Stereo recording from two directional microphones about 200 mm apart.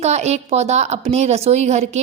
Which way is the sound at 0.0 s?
35° right (ahead or behind).